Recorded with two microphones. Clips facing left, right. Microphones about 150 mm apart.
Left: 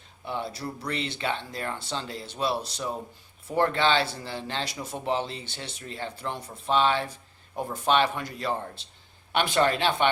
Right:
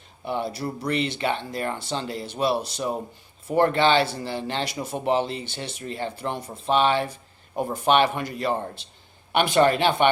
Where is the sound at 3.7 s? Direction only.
65° right (ahead or behind).